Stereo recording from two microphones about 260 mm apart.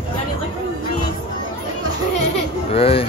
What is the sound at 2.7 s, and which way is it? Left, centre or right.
Speech, left.